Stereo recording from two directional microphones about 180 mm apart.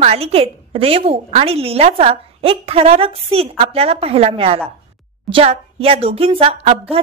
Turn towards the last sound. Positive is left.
turn(degrees=-35)  # may be behind; listen again after turning